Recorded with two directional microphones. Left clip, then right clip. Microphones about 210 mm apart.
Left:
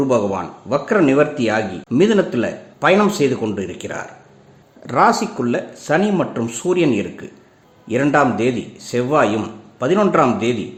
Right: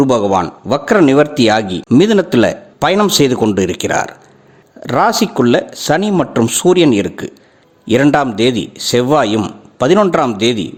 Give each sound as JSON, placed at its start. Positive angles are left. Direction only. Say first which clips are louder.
{"t": 0.0, "sound": "a man's voice", "louder": "right 6 dB", "side_deg": -45}